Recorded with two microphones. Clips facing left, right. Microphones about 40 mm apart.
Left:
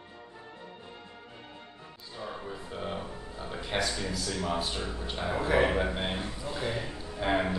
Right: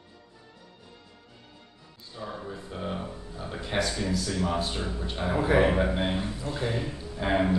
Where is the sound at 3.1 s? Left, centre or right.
Centre.